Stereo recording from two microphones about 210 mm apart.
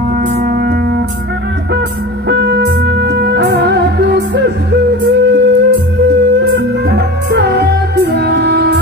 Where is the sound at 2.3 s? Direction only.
55° right (ahead or behind).